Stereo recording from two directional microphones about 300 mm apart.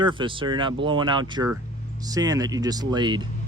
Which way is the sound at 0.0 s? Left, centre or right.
Centre.